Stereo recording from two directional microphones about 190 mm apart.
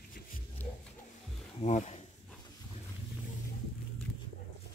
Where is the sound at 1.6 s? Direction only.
35° left (ahead or behind).